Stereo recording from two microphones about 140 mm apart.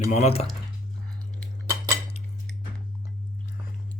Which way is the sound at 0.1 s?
50° left (ahead or behind).